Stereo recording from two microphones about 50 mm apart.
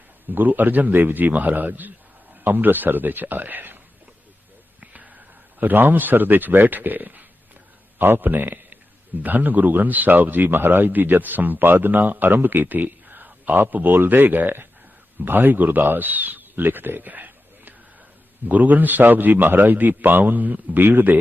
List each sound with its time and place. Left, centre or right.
0.3 s speech: right
4.8 s a man's voice: right